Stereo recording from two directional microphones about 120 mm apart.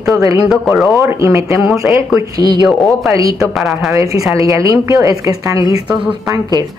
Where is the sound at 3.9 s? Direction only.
25° right (ahead or behind).